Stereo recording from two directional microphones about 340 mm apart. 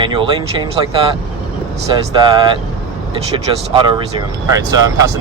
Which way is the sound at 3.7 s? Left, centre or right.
Centre.